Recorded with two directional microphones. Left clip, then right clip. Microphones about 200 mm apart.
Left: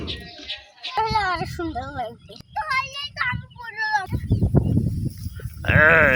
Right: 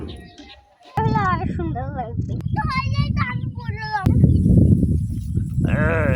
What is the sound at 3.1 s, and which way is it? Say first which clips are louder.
Child singing: left 5 dB; 40° left (ahead or behind).